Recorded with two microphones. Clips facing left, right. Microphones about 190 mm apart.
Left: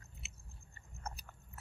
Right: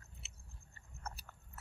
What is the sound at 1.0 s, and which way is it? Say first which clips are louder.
Biting: left 1 dB; 15° left (ahead or behind).